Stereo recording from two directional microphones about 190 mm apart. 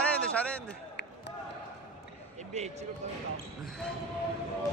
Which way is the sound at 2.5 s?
35° right (ahead or behind).